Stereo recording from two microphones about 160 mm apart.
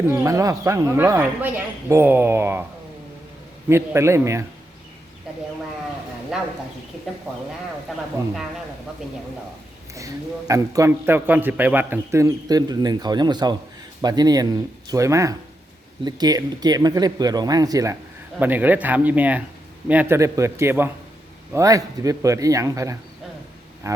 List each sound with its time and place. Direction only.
0.1 s a man's voice: 15° right (ahead or behind)
3.7 s speech: 15° right (ahead or behind)
6.3 s speech: 5° right (ahead or behind)
9.9 s a man's voice: 20° right (ahead or behind)
18.3 s a man's voice: 10° right (ahead or behind)